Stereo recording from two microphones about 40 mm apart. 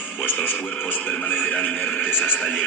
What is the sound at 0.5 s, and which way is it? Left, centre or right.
Speech, left.